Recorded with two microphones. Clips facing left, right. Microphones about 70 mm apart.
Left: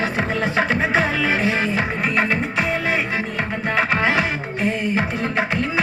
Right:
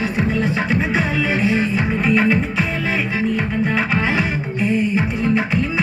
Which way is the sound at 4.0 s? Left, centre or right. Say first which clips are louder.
Even; left.